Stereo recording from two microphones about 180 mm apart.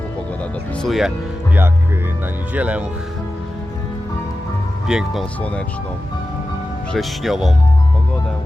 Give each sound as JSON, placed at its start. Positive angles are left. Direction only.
{"t": 0.8, "sound": "speech", "side_deg": 0}
{"t": 2.6, "sound": "speech", "side_deg": -10}
{"t": 4.9, "sound": "speech", "side_deg": -5}
{"t": 6.9, "sound": "speech", "side_deg": 0}